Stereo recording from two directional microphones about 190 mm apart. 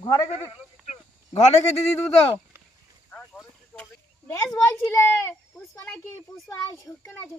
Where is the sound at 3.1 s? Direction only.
5° left (ahead or behind).